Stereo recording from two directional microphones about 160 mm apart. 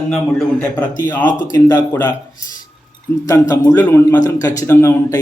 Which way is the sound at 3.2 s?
20° left (ahead or behind).